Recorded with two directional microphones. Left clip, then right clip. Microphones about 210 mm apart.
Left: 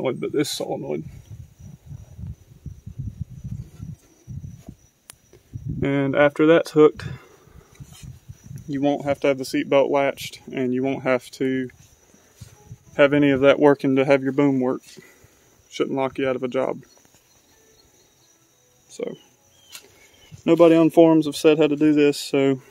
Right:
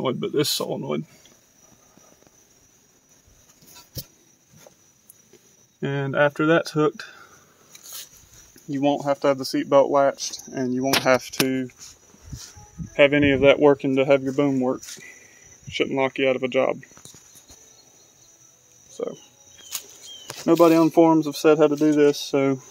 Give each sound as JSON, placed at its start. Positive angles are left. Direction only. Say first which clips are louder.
{"t": 0.0, "sound": "speech", "louder": "even", "side_deg": 5}
{"t": 5.8, "sound": "speech", "louder": "left 3 dB", "side_deg": 20}
{"t": 8.6, "sound": "speech", "louder": "even", "side_deg": 15}
{"t": 10.5, "sound": "speech", "louder": "right 1 dB", "side_deg": 30}
{"t": 12.9, "sound": "speech", "louder": "even", "side_deg": 30}
{"t": 15.8, "sound": "speech", "louder": "right 1 dB", "side_deg": 25}
{"t": 20.4, "sound": "speech", "louder": "left 1 dB", "side_deg": 30}